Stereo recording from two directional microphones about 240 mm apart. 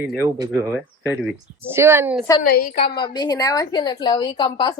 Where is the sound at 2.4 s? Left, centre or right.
Left.